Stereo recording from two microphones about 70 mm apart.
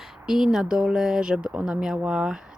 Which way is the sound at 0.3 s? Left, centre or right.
Centre.